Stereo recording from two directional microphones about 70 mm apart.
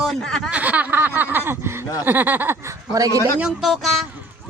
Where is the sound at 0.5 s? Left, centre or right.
Right.